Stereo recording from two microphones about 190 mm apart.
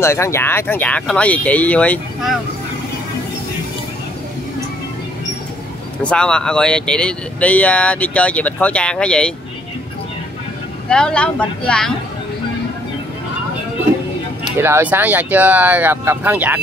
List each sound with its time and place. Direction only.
0.0 s speech: 15° left (ahead or behind)
6.0 s speech: 5° left (ahead or behind)
10.9 s speech: 5° left (ahead or behind)
14.6 s speech: 10° right (ahead or behind)